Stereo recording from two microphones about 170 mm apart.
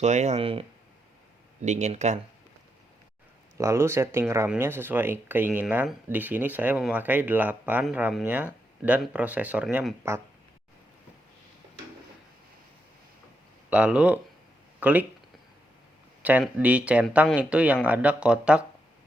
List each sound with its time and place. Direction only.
0.0 s speech: 40° right (ahead or behind)
1.6 s speech: 40° right (ahead or behind)
3.6 s speech: 15° right (ahead or behind)
13.7 s speech: 5° right (ahead or behind)
16.2 s speech: 10° right (ahead or behind)